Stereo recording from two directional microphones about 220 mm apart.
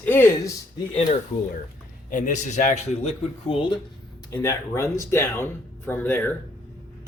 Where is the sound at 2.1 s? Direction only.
35° left (ahead or behind).